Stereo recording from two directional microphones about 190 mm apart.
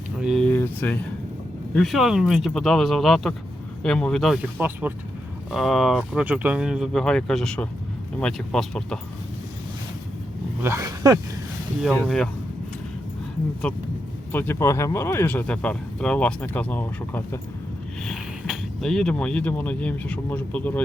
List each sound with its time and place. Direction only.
0.2 s a sound: centre (ahead or behind)
1.7 s speech: centre (ahead or behind)
10.6 s speech: 15° right (ahead or behind)
11.8 s speech: centre (ahead or behind)
13.6 s speech: 10° left (ahead or behind)
18.0 s speech: centre (ahead or behind)